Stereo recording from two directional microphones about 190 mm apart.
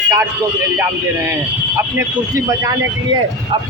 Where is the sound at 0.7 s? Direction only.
15° right (ahead or behind).